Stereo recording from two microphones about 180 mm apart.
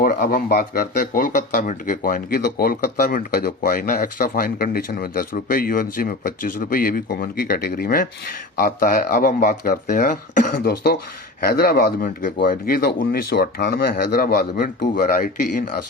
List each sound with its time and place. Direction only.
0.0 s speech: 55° left (ahead or behind)